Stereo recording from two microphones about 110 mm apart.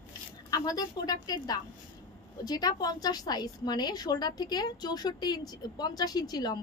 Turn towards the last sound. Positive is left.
turn(degrees=35)  # may be behind; listen again after turning